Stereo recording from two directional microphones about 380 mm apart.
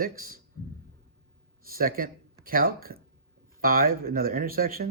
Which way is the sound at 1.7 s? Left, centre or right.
Right.